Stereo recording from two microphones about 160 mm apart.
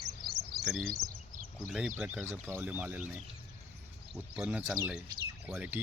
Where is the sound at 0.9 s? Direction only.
60° right (ahead or behind).